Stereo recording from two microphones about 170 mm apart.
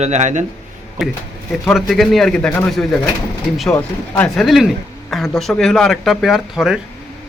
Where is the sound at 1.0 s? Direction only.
Centre (ahead or behind).